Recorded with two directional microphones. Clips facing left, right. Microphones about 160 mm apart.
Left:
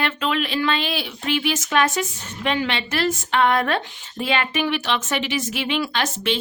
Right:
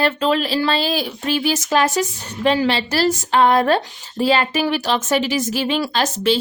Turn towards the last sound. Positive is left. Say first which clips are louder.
# right 5 dB
turn(degrees=-35)  # may be behind; listen again after turning